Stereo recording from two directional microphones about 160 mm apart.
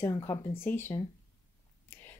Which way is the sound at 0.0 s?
20° left (ahead or behind).